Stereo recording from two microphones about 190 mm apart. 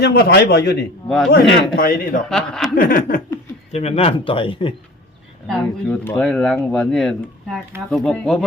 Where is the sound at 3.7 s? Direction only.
35° left (ahead or behind).